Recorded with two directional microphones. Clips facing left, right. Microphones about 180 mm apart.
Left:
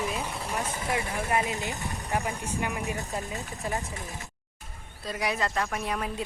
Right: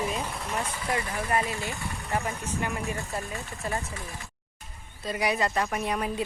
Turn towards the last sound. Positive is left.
turn(degrees=-5)  # may be behind; listen again after turning